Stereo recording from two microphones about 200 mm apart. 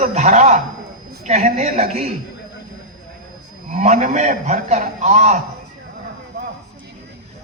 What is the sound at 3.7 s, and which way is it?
A man's voice, 40° right (ahead or behind).